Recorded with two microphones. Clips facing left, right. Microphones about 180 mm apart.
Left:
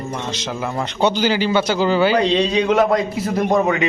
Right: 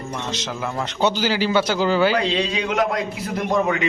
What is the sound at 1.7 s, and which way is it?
Speech, 10° left (ahead or behind).